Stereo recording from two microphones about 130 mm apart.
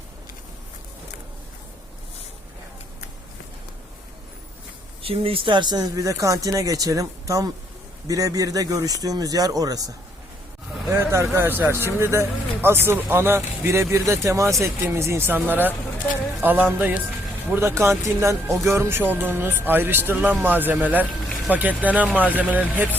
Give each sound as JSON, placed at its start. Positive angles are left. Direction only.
{"t": 5.0, "sound": "speech", "side_deg": -45}
{"t": 10.9, "sound": "speech", "side_deg": -20}
{"t": 21.2, "sound": "a sound", "side_deg": 0}
{"t": 21.5, "sound": "speech", "side_deg": -10}